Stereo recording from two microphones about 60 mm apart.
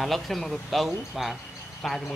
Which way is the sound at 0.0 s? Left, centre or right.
Centre.